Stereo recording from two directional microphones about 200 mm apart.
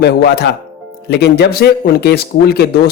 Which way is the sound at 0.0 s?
55° left (ahead or behind).